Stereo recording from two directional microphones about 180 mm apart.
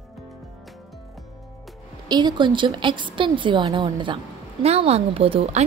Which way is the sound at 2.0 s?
25° right (ahead or behind).